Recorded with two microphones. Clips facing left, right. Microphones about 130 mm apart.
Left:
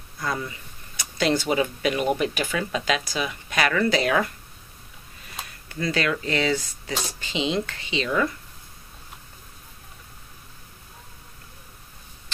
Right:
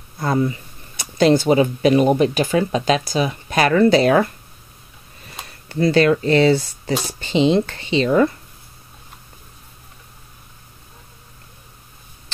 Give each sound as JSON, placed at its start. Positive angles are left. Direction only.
{"t": 0.2, "sound": "a sound", "side_deg": -30}
{"t": 1.1, "sound": "speech", "side_deg": -40}
{"t": 5.7, "sound": "speech", "side_deg": -30}